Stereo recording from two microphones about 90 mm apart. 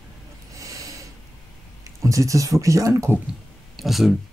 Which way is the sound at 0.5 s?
40° right (ahead or behind).